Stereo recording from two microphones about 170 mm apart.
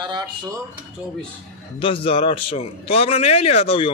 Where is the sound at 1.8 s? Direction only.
35° left (ahead or behind).